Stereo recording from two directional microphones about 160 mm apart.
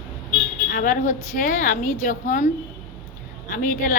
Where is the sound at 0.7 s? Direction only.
60° left (ahead or behind).